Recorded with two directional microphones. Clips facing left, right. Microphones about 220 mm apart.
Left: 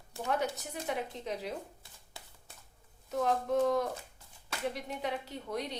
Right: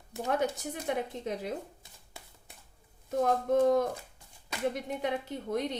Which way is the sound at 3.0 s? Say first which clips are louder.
Right 3 dB; 50° right (ahead or behind).